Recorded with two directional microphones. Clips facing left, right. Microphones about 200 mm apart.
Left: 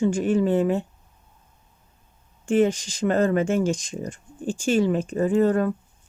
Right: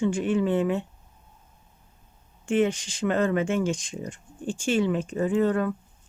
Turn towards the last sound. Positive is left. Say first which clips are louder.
# left 3 dB
turn(degrees=40)  # may be behind; listen again after turning